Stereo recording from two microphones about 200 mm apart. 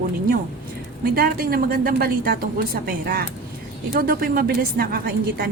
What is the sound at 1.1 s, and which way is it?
A woman's voice, 50° right (ahead or behind).